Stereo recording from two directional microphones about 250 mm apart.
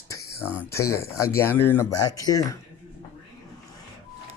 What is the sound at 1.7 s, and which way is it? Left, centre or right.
Speech, left.